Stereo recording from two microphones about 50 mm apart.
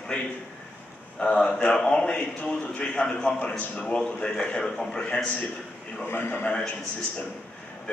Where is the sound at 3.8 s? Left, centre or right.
Centre.